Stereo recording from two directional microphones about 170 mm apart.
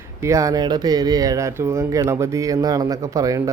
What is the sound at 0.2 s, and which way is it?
Speech, 20° right (ahead or behind).